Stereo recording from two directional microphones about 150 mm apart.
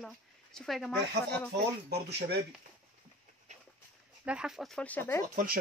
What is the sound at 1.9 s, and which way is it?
Speech, 90° right.